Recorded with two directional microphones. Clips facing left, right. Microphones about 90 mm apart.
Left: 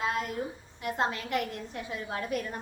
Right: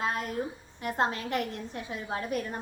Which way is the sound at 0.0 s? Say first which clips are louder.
Even; 40° right (ahead or behind).